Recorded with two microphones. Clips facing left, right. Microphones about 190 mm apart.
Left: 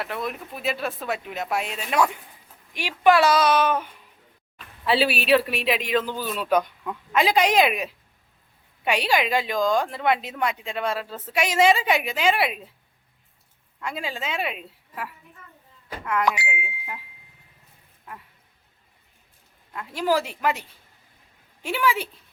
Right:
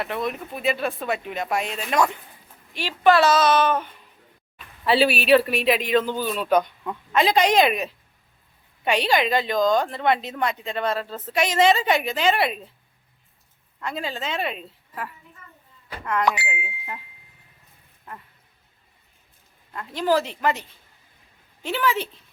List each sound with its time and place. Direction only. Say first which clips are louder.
0.0 s a woman's voice: right 3 dB; centre (ahead or behind)
13.8 s a woman's voice: right 1 dB; 10° left (ahead or behind)
19.7 s a woman's voice: right 2 dB; 5° left (ahead or behind)